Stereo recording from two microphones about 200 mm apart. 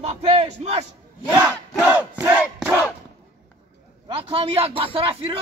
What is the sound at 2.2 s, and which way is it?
Crowd, 10° right (ahead or behind).